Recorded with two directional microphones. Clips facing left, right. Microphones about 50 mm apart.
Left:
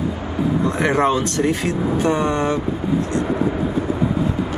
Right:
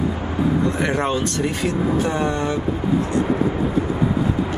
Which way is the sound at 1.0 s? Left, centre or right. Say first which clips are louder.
Left 3 dB; centre.